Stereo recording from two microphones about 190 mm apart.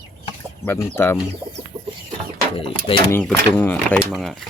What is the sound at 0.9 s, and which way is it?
Speech, 10° left (ahead or behind).